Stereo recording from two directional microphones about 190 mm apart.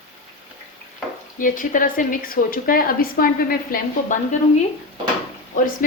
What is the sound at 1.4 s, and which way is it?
A woman's voice, 45° left (ahead or behind).